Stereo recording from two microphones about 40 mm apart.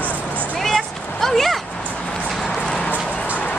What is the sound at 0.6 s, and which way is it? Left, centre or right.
Speech, centre.